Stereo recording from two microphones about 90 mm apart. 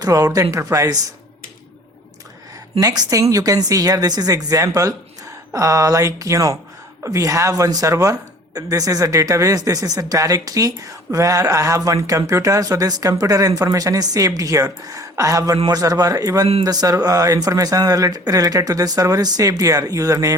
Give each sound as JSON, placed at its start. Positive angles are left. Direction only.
{"t": 0.0, "sound": "speech", "side_deg": -40}
{"t": 2.8, "sound": "speech", "side_deg": -40}